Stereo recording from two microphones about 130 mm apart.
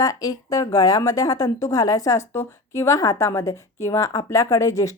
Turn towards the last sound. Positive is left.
turn(degrees=25)  # may be behind; listen again after turning